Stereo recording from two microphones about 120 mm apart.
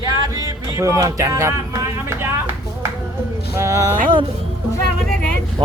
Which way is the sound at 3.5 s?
25° right (ahead or behind).